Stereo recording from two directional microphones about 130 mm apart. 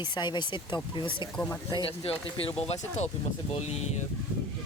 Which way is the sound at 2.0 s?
45° left (ahead or behind).